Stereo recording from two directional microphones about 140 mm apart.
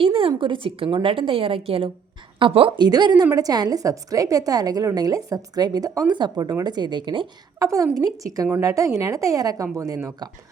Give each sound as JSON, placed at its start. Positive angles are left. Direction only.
{"t": 0.0, "sound": "a woman's voice", "side_deg": -40}
{"t": 8.0, "sound": "a woman's voice", "side_deg": -25}